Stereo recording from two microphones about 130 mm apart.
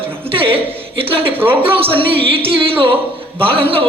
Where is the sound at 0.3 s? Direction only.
45° right (ahead or behind).